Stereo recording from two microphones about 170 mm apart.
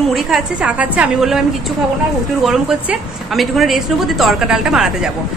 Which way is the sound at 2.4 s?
5° right (ahead or behind).